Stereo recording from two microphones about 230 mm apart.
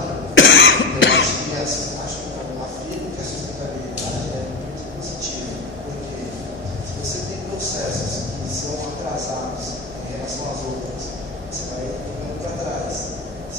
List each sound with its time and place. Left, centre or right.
0.3 s cough: left